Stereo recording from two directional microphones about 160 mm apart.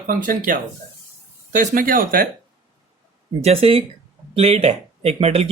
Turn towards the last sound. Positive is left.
turn(degrees=-40)  # may be behind; listen again after turning